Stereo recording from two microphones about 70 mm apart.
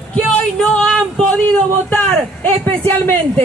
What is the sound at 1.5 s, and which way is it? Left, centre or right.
A man's voice, left.